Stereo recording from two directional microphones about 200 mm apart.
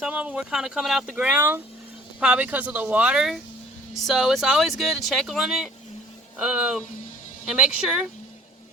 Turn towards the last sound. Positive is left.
turn(degrees=-5)  # may be behind; listen again after turning